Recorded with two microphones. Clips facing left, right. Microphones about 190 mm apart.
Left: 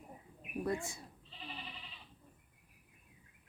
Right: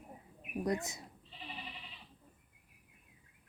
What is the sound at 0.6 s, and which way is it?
Speech, 20° right (ahead or behind).